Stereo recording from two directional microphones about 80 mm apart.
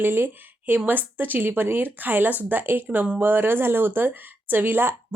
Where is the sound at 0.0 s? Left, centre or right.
Right.